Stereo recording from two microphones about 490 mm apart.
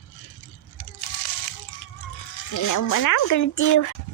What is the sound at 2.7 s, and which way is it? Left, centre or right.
Speech, left.